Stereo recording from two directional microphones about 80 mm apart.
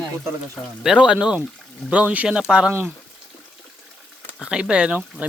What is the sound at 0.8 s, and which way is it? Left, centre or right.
Speech, centre.